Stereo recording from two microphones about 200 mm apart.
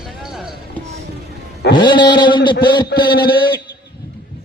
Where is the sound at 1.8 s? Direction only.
25° left (ahead or behind).